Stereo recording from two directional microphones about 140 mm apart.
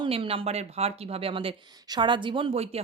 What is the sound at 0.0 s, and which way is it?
Speech, 40° right (ahead or behind).